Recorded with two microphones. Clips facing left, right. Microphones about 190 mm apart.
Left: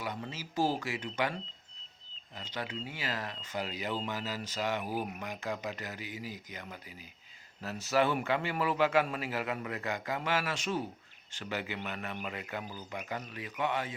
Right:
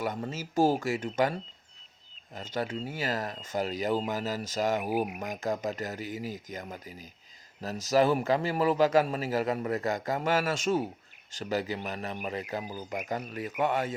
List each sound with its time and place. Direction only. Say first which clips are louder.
0.0 s speech: right 6 dB; 45° right (ahead or behind)
4.8 s speech: right 6 dB; 15° right (ahead or behind)
5.2 s a man's voice: right 6 dB; 45° right (ahead or behind)